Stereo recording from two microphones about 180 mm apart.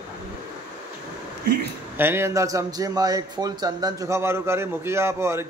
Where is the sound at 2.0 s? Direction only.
15° right (ahead or behind).